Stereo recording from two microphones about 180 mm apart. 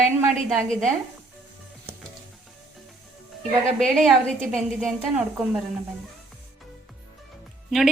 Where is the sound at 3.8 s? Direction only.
Centre (ahead or behind).